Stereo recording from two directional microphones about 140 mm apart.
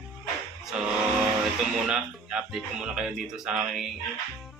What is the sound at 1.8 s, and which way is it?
Speech, 5° right (ahead or behind).